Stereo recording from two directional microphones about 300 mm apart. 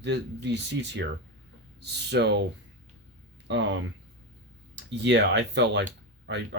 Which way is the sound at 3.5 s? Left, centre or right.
Right.